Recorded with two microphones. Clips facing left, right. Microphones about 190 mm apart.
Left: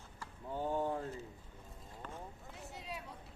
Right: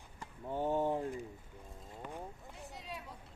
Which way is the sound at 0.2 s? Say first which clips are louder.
Right 3 dB; 20° right (ahead or behind).